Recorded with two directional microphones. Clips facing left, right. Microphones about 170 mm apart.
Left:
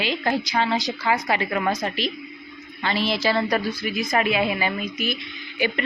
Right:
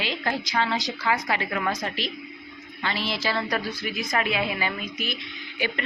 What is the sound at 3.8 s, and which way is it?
A woman's voice, 5° left (ahead or behind).